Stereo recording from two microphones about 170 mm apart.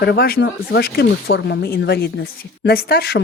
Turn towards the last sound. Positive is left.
turn(degrees=75)  # may be behind; listen again after turning